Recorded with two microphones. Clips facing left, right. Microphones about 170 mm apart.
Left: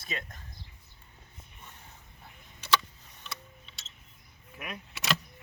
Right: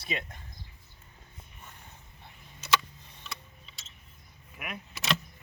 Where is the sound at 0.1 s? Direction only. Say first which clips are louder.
Right 3 dB; 20° right (ahead or behind).